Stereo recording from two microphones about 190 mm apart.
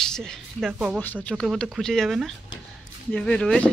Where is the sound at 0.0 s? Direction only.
5° left (ahead or behind).